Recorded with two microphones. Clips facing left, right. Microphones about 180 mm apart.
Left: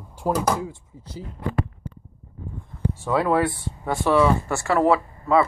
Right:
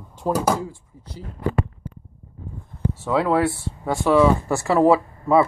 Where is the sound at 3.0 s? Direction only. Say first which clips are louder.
Right 1 dB; centre (ahead or behind).